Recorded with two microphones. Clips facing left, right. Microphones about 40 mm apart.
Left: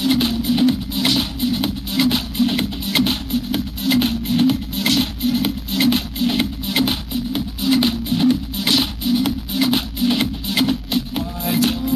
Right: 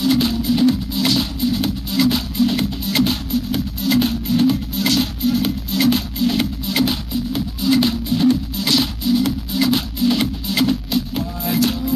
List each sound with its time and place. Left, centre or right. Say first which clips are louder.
0.0 s music: right 1 dB; left